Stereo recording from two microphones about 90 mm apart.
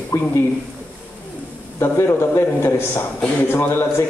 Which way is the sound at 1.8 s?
30° left (ahead or behind).